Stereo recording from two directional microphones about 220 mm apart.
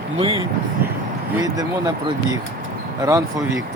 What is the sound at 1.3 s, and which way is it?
Speech, 15° right (ahead or behind).